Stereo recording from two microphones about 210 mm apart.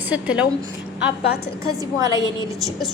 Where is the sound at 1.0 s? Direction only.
50° left (ahead or behind).